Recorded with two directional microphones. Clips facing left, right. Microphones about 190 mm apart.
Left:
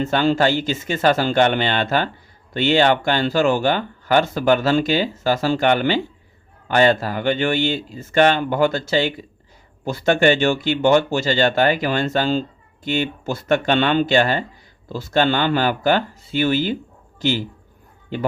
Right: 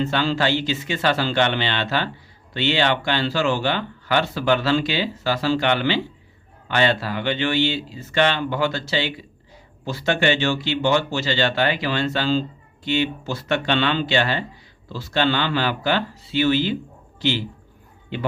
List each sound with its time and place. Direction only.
0.0 s speech: 45° left (ahead or behind)